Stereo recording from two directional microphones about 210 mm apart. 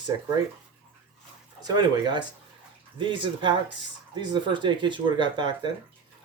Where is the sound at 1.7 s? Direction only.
20° right (ahead or behind).